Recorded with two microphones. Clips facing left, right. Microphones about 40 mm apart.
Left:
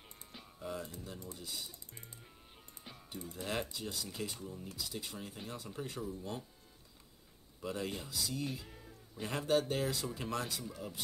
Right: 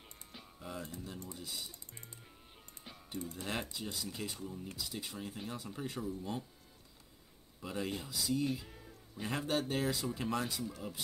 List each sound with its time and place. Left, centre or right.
0.0 s music: centre
1.3 s speech: centre
2.8 s music: centre
3.3 s speech: centre
7.6 s speech: centre